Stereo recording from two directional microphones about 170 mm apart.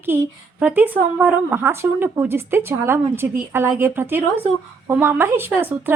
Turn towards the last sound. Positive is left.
turn(degrees=-10)  # may be behind; listen again after turning